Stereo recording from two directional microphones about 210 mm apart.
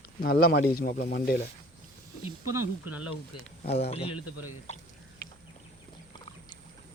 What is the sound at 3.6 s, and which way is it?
Speech, 30° left (ahead or behind).